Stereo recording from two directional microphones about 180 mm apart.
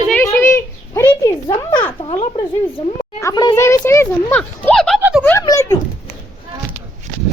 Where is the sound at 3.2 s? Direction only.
20° left (ahead or behind); by 5.0 s centre (ahead or behind).